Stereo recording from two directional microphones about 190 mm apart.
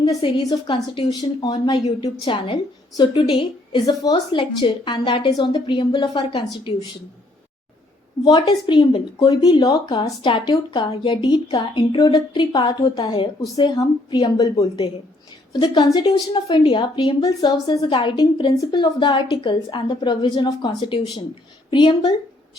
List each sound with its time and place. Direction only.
0.0 s a woman's voice: 20° left (ahead or behind)
8.2 s a woman's voice: 25° left (ahead or behind)